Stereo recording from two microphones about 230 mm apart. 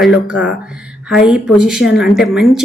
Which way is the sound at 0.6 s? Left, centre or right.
Centre.